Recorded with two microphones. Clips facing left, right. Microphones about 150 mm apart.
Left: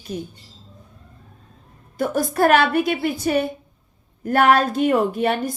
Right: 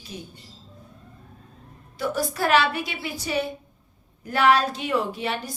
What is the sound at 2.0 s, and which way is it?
A woman's voice, 50° left (ahead or behind).